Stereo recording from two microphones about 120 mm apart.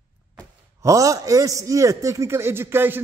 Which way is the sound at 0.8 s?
25° right (ahead or behind).